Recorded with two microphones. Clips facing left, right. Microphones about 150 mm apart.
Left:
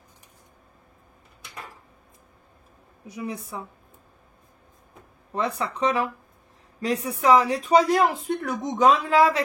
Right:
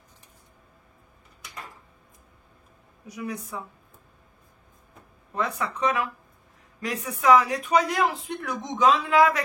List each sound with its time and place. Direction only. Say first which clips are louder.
3.1 s speech: left 1 dB; 25° left (ahead or behind)
5.3 s speech: left 2 dB; 30° left (ahead or behind)